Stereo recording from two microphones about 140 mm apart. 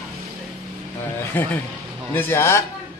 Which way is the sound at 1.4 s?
10° left (ahead or behind).